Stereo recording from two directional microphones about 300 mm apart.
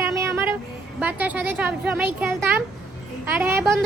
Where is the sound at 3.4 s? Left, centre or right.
Centre.